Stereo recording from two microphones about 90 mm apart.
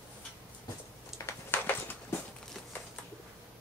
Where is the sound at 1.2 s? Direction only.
25° left (ahead or behind).